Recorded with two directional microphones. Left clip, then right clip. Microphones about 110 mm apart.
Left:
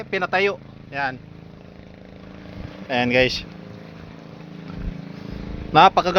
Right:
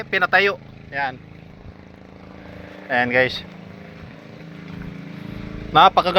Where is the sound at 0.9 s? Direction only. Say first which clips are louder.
Right 1 dB; 90° left.